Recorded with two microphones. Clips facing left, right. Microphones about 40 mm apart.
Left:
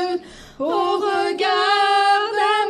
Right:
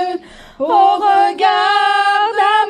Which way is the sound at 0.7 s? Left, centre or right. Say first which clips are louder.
Right 9 dB; right.